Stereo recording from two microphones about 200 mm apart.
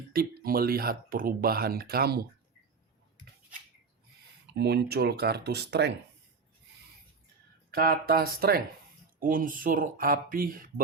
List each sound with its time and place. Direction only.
0.1 s speech: 50° right (ahead or behind)
4.5 s speech: 55° right (ahead or behind)
7.7 s speech: 50° right (ahead or behind)